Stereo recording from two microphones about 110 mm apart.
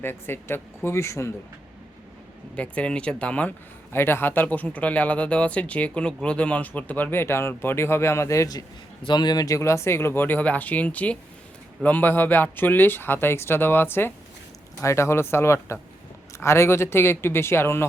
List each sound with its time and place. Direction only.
0.0 s speech: 20° left (ahead or behind)
2.6 s speech: 10° left (ahead or behind)